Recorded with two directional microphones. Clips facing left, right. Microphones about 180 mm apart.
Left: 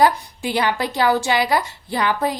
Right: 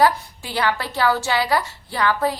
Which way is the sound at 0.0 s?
15° left (ahead or behind).